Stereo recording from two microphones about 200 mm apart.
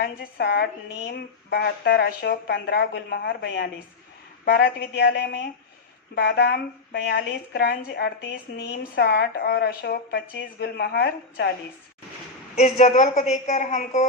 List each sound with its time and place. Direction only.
0.0 s a woman's voice: 50° left (ahead or behind)
12.5 s a woman's voice: 35° left (ahead or behind)